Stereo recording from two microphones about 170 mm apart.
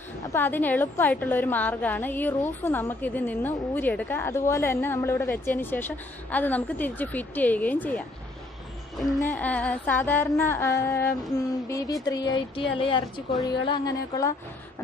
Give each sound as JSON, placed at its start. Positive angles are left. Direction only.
{"t": 0.3, "sound": "a woman's voice", "side_deg": 10}
{"t": 9.2, "sound": "a woman's voice", "side_deg": 10}